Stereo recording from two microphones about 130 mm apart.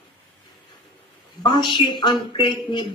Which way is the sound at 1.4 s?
35° left (ahead or behind).